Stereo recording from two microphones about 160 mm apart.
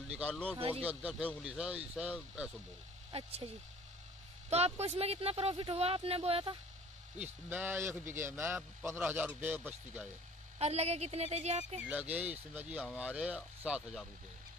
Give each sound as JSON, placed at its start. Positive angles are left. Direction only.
{"t": 0.1, "sound": "speech", "side_deg": -10}
{"t": 3.1, "sound": "speech", "side_deg": -35}
{"t": 4.5, "sound": "speech", "side_deg": -40}
{"t": 7.2, "sound": "speech", "side_deg": -10}
{"t": 10.6, "sound": "speech", "side_deg": -40}
{"t": 11.8, "sound": "speech", "side_deg": -10}